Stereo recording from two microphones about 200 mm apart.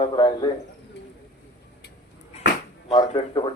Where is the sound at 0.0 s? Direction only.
20° left (ahead or behind).